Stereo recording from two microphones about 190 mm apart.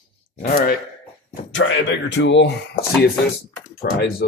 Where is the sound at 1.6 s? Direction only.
75° left (ahead or behind).